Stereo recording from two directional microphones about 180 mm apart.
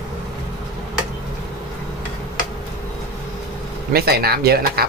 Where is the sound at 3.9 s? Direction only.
60° right (ahead or behind).